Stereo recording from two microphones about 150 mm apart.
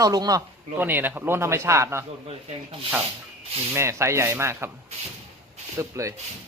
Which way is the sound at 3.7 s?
20° right (ahead or behind).